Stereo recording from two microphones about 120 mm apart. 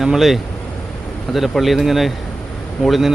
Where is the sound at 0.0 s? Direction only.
Centre (ahead or behind).